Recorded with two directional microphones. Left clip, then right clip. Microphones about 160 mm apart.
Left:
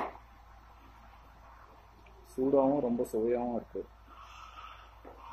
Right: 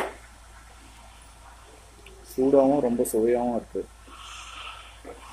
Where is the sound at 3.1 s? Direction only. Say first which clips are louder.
Right 9 dB; 15° right (ahead or behind).